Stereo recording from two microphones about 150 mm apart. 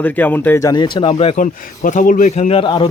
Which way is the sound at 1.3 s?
60° left (ahead or behind).